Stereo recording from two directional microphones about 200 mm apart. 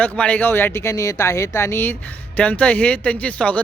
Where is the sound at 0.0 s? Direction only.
5° left (ahead or behind).